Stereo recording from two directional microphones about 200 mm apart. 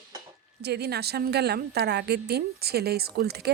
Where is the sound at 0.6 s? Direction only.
55° right (ahead or behind).